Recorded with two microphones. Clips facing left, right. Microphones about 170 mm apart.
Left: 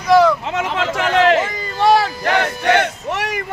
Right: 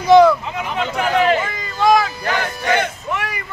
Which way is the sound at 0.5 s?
90° left.